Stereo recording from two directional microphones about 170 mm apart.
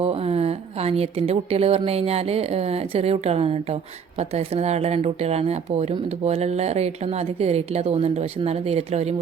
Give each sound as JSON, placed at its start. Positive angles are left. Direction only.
{"t": 0.0, "sound": "a woman's voice", "side_deg": -35}